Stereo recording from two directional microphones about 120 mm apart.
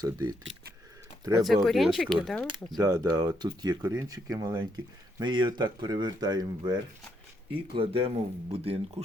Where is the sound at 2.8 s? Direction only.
30° right (ahead or behind).